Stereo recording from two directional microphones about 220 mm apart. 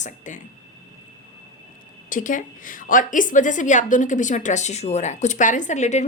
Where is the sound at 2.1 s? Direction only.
35° left (ahead or behind).